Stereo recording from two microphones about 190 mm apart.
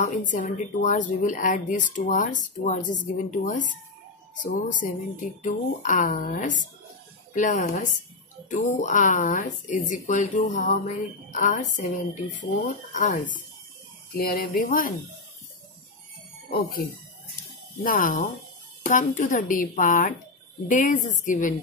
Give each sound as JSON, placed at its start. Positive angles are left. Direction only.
{"t": 0.0, "sound": "speech", "side_deg": 40}
{"t": 14.1, "sound": "speech", "side_deg": 55}
{"t": 17.8, "sound": "speech", "side_deg": 45}